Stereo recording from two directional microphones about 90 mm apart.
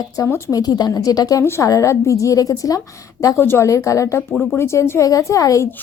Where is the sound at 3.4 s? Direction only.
25° left (ahead or behind).